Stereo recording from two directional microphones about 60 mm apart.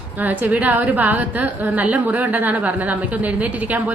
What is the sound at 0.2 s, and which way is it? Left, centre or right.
A woman's voice, right.